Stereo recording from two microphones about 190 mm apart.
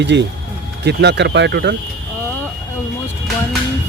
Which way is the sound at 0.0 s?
65° right (ahead or behind).